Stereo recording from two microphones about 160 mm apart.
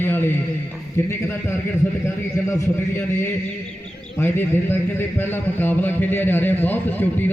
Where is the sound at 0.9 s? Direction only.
15° left (ahead or behind).